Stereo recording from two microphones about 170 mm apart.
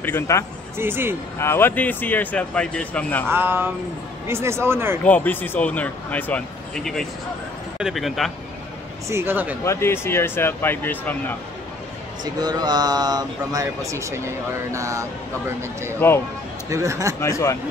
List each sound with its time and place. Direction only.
0.0 s speech: 15° left (ahead or behind)
0.7 s speech: 15° right (ahead or behind)
1.4 s speech: 15° left (ahead or behind)
3.3 s speech: 10° right (ahead or behind)
5.0 s speech: 10° left (ahead or behind)
9.1 s speech: 10° right (ahead or behind)
9.7 s speech: 15° left (ahead or behind)
12.4 s speech: 25° right (ahead or behind)
16.0 s speech: 10° left (ahead or behind)
16.6 s speech: 20° right (ahead or behind)
17.2 s speech: 20° left (ahead or behind)